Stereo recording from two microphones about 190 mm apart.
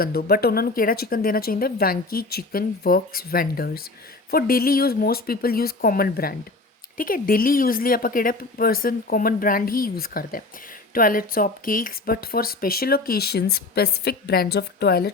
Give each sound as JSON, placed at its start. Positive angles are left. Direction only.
{"t": 0.0, "sound": "speech", "side_deg": 55}